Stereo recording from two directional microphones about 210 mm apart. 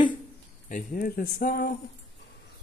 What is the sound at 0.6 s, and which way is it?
Speech, 40° left (ahead or behind).